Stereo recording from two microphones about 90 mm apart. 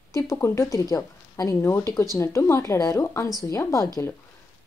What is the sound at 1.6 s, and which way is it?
A woman's voice, 25° left (ahead or behind).